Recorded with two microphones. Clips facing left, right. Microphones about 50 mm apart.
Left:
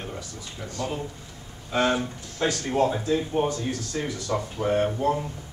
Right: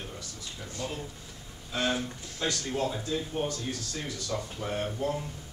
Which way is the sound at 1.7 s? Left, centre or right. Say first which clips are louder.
Left 7 dB; left.